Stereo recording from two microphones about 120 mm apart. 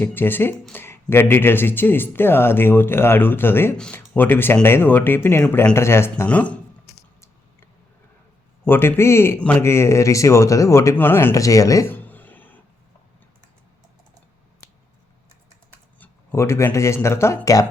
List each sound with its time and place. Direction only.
0.0 s speech: 15° left (ahead or behind)
6.2 s speech: 10° left (ahead or behind)
8.6 s speech: 20° left (ahead or behind)
16.0 s speech: 20° left (ahead or behind)